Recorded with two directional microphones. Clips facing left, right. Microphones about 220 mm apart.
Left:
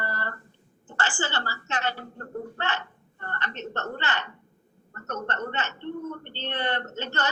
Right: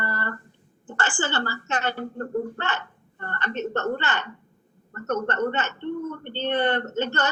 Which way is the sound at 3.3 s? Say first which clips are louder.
Right 7 dB; 50° right (ahead or behind).